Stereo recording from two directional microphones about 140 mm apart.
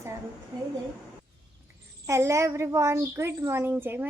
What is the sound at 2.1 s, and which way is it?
A woman's voice, 20° right (ahead or behind).